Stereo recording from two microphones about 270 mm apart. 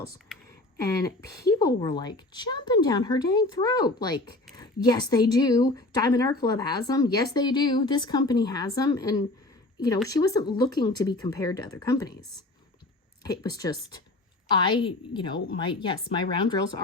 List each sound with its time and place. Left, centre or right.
0.9 s a woman's voice: centre
13.2 s a woman's voice: centre